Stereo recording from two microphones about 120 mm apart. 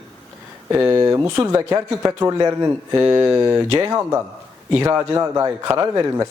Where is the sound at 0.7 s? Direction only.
35° right (ahead or behind).